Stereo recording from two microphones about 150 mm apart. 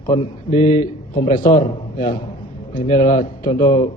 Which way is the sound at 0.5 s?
55° left (ahead or behind).